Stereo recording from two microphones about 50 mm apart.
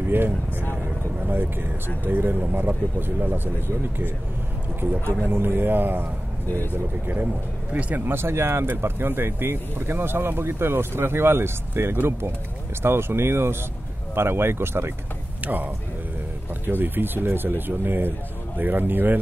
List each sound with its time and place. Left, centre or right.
0.1 s speech: right
6.4 s speech: left
6.7 s speech: right
8.0 s speech: right
15.4 s speech: right